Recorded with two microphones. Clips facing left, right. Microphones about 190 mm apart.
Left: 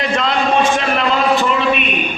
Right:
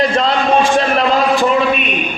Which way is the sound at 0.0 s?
35° right (ahead or behind).